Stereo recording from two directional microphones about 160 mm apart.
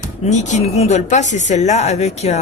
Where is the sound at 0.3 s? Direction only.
50° left (ahead or behind).